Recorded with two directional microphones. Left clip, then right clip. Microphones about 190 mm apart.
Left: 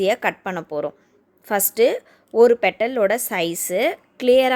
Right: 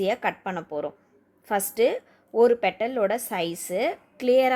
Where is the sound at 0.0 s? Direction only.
30° left (ahead or behind).